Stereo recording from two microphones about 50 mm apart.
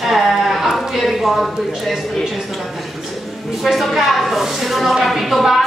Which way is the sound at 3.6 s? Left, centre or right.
Centre.